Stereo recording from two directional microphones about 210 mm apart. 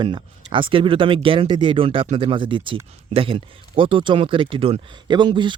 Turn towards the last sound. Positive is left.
turn(degrees=-20)  # may be behind; listen again after turning